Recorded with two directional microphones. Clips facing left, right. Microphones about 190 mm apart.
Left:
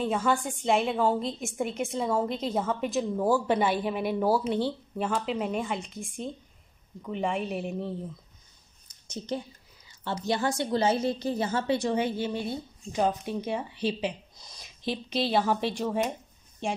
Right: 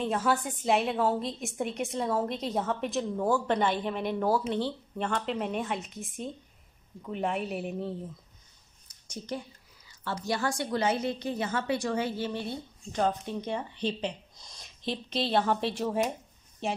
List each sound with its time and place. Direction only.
0.0 s a woman's voice: centre (ahead or behind)
9.0 s a woman's voice: 25° left (ahead or behind); by 16.8 s 5° right (ahead or behind)